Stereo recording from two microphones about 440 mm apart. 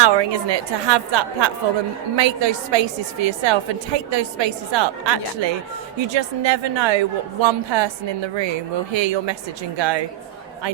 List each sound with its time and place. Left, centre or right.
0.0 s a woman's voice: right